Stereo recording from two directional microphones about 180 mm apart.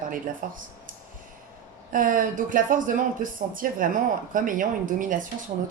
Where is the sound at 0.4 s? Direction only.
50° right (ahead or behind).